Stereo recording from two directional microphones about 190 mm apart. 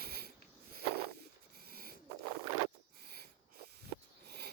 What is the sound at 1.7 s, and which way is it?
Owl, 50° right (ahead or behind).